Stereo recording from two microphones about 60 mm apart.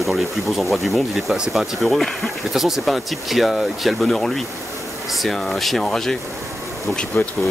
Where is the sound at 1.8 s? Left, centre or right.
Centre.